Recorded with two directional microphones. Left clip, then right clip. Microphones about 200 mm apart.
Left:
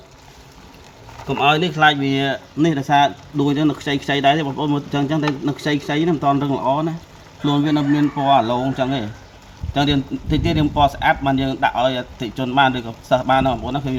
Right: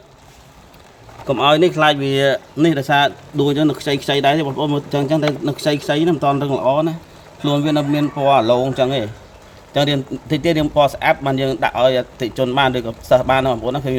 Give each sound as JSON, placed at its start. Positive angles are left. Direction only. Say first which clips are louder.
{"t": 1.3, "sound": "speech", "louder": "right 3 dB", "side_deg": -55}